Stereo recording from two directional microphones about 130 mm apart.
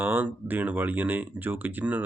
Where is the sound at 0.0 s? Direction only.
15° right (ahead or behind).